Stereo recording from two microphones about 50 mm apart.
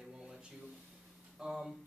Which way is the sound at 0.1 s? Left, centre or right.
Centre.